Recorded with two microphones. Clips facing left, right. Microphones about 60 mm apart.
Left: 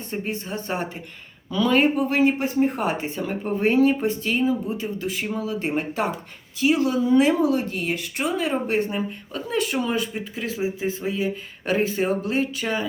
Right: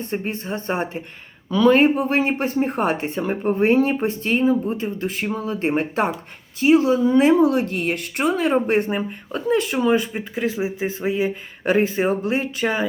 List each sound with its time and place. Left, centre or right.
0.1 s speech: right
3.2 s speech: right
7.4 s speech: right